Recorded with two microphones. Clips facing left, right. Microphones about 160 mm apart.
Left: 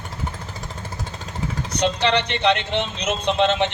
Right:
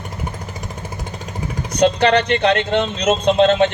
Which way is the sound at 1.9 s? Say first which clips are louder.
Right 6 dB; 55° right (ahead or behind).